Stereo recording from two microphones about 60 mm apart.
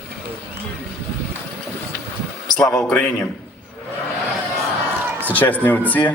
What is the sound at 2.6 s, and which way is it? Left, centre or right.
Speech, centre.